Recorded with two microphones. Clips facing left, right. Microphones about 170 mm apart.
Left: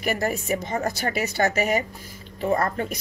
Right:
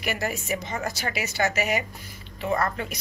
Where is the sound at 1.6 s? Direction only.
45° left (ahead or behind).